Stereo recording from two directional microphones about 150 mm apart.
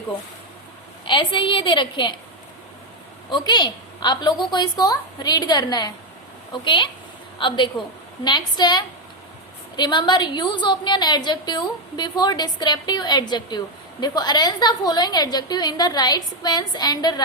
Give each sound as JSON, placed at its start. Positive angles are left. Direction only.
{"t": 1.0, "sound": "a woman's voice", "side_deg": 30}
{"t": 3.2, "sound": "a woman's voice", "side_deg": 30}